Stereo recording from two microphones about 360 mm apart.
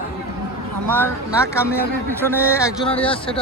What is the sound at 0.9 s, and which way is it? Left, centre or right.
Speech, centre.